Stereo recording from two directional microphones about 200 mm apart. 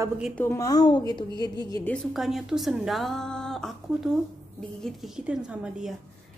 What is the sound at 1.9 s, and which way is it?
A woman's voice, centre (ahead or behind).